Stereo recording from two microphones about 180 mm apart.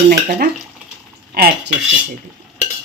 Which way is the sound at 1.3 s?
55° right (ahead or behind).